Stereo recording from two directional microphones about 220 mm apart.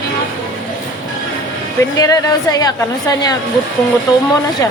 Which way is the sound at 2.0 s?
15° left (ahead or behind).